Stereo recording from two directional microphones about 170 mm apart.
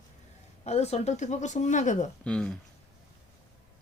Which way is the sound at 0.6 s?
40° left (ahead or behind).